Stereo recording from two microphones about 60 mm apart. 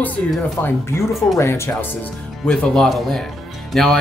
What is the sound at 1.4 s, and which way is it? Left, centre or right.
Speech, left.